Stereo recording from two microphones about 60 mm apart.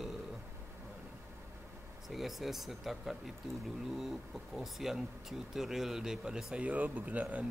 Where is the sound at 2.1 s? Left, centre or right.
Centre.